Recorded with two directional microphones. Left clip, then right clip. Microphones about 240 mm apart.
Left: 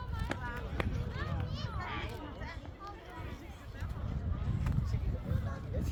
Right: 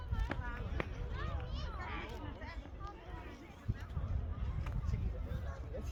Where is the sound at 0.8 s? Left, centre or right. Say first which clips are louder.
Left 4 dB; left.